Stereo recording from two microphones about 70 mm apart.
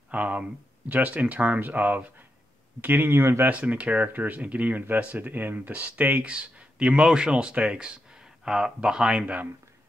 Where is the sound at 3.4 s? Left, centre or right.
Centre.